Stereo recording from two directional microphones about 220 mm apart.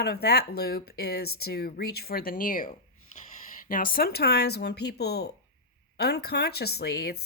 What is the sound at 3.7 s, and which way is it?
Speech, 40° left (ahead or behind).